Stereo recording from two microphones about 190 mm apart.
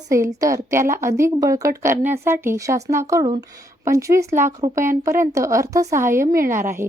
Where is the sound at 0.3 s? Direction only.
15° right (ahead or behind).